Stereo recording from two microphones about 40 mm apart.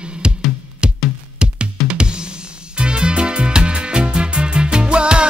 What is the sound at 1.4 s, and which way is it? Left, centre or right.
Drum, right.